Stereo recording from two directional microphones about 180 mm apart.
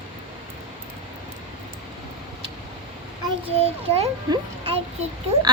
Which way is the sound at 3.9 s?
35° right (ahead or behind).